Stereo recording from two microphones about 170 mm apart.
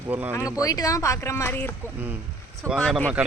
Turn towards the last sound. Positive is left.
turn(degrees=0)  # may be behind; listen again after turning